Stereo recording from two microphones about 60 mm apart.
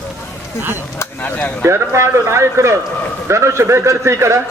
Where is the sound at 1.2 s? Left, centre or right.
Left.